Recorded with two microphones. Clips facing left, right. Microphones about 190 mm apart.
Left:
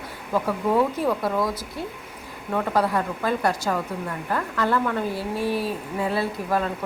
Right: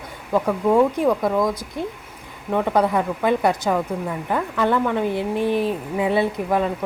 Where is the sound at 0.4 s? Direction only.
15° right (ahead or behind).